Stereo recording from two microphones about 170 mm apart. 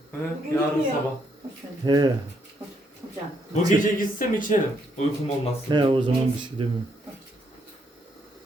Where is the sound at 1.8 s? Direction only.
25° right (ahead or behind).